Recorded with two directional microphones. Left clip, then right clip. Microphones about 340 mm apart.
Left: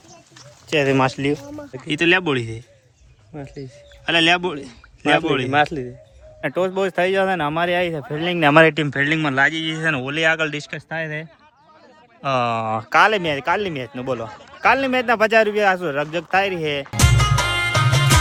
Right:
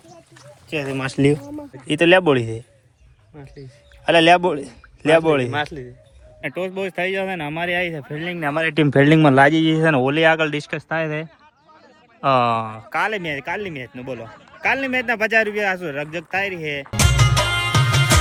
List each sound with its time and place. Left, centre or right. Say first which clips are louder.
0.9 s speech: left 8 dB; left
1.9 s speech: right 3 dB; centre
3.3 s speech: left 7 dB; left
4.0 s speech: right 3 dB; centre
5.5 s speech: left 6 dB; left
6.4 s a man's voice: left 5 dB; centre
8.4 s speech: left 10 dB; left
8.7 s speech: right 5 dB; centre
12.7 s a man's voice: left 7 dB; centre
16.8 s music: even; centre